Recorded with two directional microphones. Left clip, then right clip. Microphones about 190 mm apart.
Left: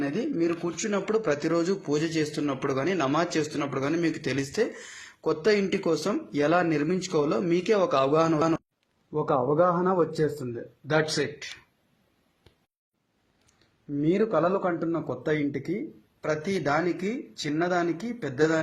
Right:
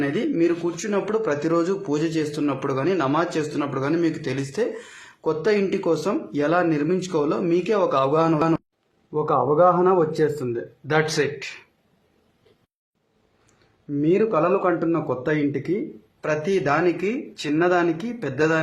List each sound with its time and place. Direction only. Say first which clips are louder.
0.0 s speech: right 6 dB; 15° left (ahead or behind)
14.0 s speech: right 4 dB; 25° left (ahead or behind)